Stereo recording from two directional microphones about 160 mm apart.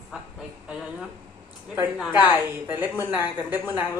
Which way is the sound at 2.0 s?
10° right (ahead or behind).